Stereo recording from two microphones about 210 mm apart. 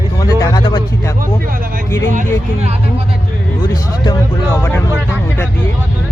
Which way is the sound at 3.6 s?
15° left (ahead or behind).